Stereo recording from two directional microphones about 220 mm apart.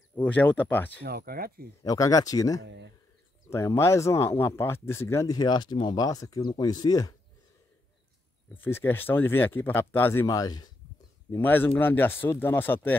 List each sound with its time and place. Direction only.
0.1 s speech: 5° left (ahead or behind)
1.0 s speech: 45° right (ahead or behind)
1.8 s speech: 15° left (ahead or behind)
2.6 s speech: 55° right (ahead or behind)
3.4 s speech: 10° left (ahead or behind)
8.5 s speech: 10° left (ahead or behind)